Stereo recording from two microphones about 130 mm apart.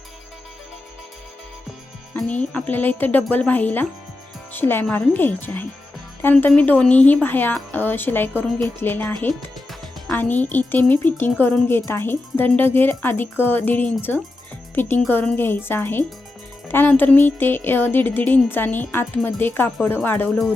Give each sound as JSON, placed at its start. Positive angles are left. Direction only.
{"t": 2.1, "sound": "speech", "side_deg": 5}